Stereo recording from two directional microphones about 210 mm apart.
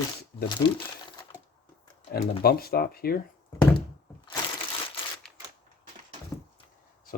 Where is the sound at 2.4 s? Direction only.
45° left (ahead or behind).